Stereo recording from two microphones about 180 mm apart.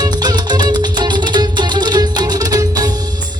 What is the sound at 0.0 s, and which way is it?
Music, 25° right (ahead or behind).